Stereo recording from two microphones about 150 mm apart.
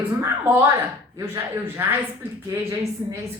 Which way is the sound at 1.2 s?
15° right (ahead or behind).